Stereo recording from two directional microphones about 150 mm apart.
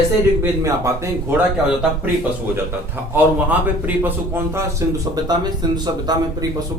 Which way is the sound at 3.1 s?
10° right (ahead or behind).